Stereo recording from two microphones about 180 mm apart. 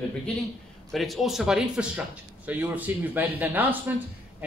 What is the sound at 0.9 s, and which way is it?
Speech, centre (ahead or behind).